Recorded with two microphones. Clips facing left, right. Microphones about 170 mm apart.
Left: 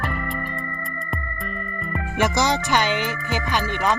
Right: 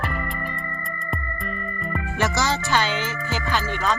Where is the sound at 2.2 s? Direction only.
15° left (ahead or behind).